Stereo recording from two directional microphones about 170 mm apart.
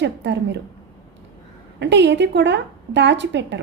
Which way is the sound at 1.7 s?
90° right.